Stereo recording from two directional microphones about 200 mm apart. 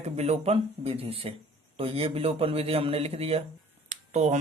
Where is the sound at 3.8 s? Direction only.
35° right (ahead or behind).